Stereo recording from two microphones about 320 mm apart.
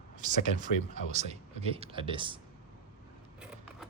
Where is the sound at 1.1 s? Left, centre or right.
Right.